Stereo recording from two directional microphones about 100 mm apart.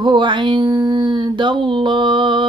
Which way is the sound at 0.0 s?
55° right (ahead or behind).